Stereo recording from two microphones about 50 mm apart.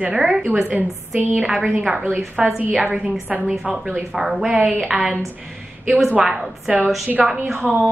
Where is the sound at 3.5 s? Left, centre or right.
Right.